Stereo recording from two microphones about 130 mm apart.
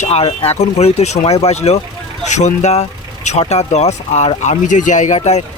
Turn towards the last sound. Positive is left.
turn(degrees=60)  # may be behind; listen again after turning